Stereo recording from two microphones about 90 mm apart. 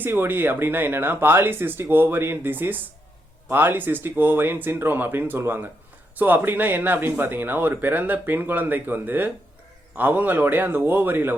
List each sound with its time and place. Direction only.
0.0 s speech: 25° right (ahead or behind)